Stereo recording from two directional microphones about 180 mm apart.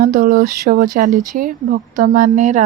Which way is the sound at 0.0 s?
50° right (ahead or behind).